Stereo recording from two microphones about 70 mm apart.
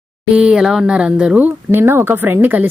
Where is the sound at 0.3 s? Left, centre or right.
Centre.